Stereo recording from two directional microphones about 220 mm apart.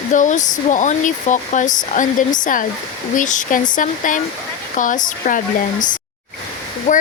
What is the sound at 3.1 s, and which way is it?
Speech, 35° left (ahead or behind).